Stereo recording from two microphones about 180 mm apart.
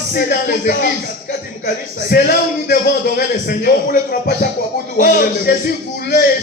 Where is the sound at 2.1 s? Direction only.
60° left (ahead or behind).